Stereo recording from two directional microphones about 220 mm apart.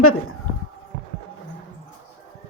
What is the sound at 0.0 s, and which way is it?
Speech, 75° left (ahead or behind).